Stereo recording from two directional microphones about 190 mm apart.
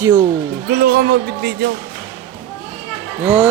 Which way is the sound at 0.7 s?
55° right (ahead or behind).